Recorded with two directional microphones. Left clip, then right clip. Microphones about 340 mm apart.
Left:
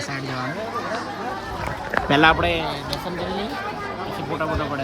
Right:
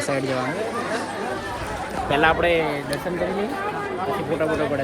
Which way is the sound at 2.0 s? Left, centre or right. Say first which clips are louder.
Left 1 dB; left.